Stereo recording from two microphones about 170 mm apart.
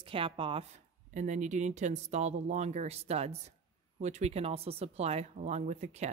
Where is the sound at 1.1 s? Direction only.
45° right (ahead or behind).